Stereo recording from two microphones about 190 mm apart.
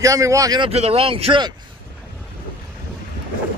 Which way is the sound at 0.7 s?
30° right (ahead or behind).